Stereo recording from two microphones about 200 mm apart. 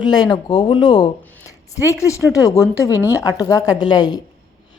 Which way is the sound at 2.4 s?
15° left (ahead or behind).